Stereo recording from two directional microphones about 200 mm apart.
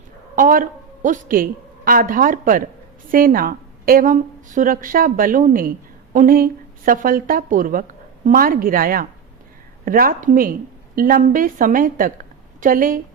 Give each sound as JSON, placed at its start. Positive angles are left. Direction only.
{"t": 0.3, "sound": "a woman's voice", "side_deg": -40}